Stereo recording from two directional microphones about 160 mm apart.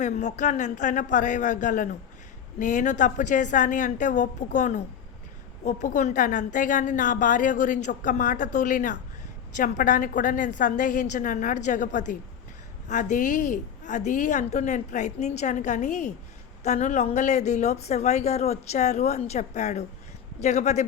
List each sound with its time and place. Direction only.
0.0 s a woman's voice: 45° left (ahead or behind)